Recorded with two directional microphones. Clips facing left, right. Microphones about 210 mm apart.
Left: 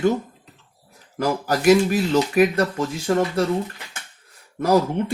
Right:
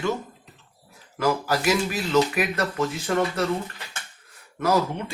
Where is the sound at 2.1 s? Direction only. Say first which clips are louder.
Left 3 dB; 30° left (ahead or behind).